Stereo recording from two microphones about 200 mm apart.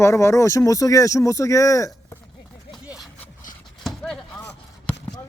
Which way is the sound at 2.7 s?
Centre (ahead or behind).